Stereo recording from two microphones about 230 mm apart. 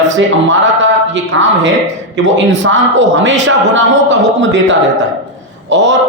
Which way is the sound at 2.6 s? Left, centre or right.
Right.